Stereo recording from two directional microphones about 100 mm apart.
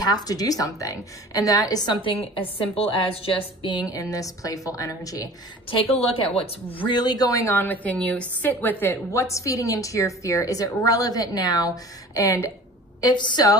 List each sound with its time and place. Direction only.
0.0 s a woman's voice: 40° left (ahead or behind)
2.0 s a woman's voice: 60° left (ahead or behind)
3.7 s a woman's voice: 35° left (ahead or behind)
5.7 s a woman's voice: 80° left
6.9 s a woman's voice: 45° left (ahead or behind)
7.6 s a woman's voice: 15° left (ahead or behind); by 12.4 s 35° left (ahead or behind)
13.0 s a woman's voice: 50° left (ahead or behind)